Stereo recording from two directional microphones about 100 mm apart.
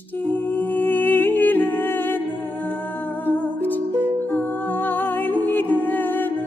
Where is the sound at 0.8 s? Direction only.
20° left (ahead or behind).